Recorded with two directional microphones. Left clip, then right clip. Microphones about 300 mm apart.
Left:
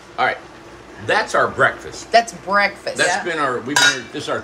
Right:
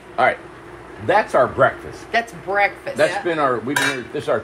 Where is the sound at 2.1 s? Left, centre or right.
Centre.